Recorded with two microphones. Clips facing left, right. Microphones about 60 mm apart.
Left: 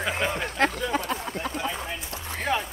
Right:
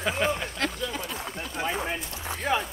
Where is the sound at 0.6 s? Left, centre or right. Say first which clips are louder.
Left 9 dB; left.